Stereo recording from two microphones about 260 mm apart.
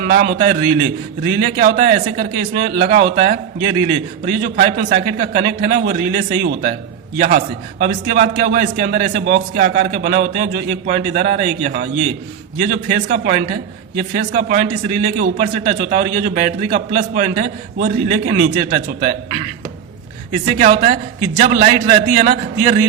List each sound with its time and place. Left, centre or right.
0.0 s a man's voice: right
20.4 s a man's voice: right